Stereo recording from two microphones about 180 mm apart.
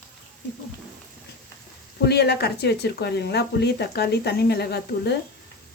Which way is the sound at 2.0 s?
65° left (ahead or behind).